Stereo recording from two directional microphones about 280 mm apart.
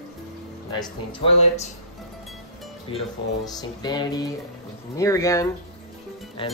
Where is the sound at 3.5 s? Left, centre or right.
Centre.